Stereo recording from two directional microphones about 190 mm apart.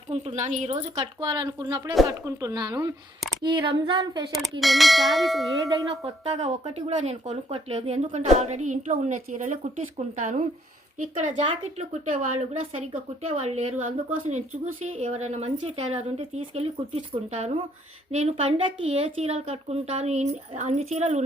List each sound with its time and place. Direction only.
0.1 s speech: 35° right (ahead or behind)
4.6 s bell: centre (ahead or behind)
6.2 s speech: 30° right (ahead or behind)
14.9 s speech: 35° right (ahead or behind)